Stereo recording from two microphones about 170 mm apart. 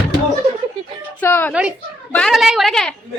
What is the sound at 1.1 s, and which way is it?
Speech, 10° left (ahead or behind).